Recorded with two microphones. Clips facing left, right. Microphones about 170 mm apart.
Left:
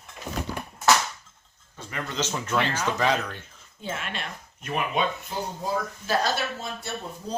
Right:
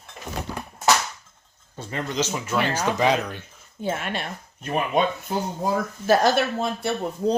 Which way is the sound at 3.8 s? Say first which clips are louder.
Right 6 dB; 40° right (ahead or behind).